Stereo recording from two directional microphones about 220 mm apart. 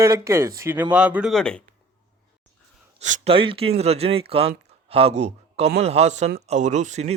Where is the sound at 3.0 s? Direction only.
30° right (ahead or behind).